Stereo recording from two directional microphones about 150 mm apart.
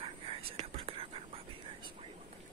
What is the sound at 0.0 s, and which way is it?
Whispering, 40° right (ahead or behind).